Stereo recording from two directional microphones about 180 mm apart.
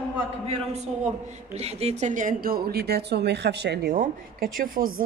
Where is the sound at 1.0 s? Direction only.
35° right (ahead or behind).